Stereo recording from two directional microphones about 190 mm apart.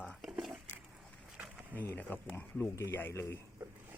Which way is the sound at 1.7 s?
10° left (ahead or behind).